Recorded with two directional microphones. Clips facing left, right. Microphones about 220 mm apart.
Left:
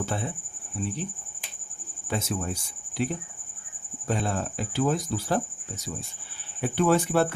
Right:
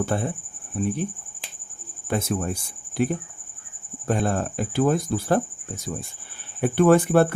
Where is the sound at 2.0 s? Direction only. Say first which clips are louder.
Right 5 dB; 55° right (ahead or behind).